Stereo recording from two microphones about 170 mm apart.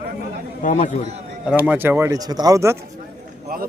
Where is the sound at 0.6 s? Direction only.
45° left (ahead or behind).